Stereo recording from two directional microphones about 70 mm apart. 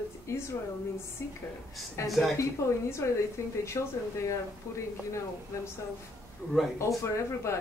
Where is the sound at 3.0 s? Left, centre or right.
Left.